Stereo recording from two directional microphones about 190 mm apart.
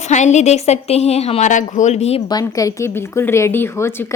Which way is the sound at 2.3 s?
20° left (ahead or behind).